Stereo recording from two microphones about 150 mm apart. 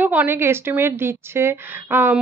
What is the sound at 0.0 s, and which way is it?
A woman's voice, 10° right (ahead or behind).